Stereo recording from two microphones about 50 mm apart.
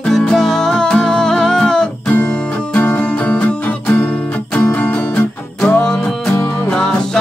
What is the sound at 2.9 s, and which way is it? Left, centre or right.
Music, left.